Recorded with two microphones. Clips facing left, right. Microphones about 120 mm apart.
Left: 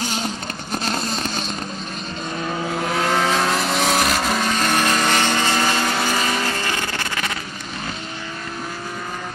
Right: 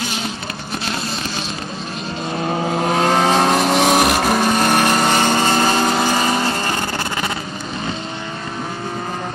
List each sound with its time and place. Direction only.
0.8 s vehicle: 45° left (ahead or behind)
2.4 s vehicle: 30° right (ahead or behind)
3.1 s vehicle: 55° right (ahead or behind)
3.9 s vehicle: 45° right (ahead or behind)
5.1 s vehicle: 35° right (ahead or behind)